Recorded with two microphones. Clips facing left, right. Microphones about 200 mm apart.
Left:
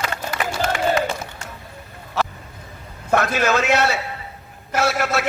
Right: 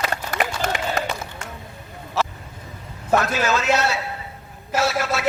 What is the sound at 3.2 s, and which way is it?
A man's voice, 55° left (ahead or behind).